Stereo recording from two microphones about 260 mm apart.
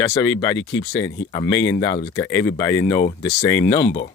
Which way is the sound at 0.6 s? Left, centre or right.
Left.